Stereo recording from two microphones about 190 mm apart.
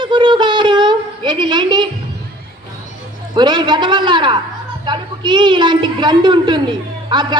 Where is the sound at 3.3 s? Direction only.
25° right (ahead or behind).